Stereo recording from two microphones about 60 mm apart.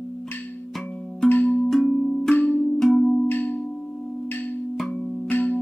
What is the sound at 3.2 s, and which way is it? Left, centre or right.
Music, left.